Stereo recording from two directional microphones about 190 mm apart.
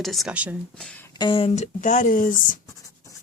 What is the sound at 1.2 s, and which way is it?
Speech, 25° left (ahead or behind).